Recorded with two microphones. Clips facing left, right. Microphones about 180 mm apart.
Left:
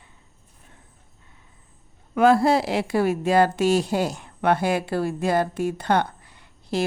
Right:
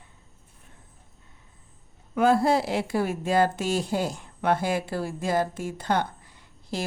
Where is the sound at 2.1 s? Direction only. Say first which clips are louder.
Left 3 dB; 75° left (ahead or behind).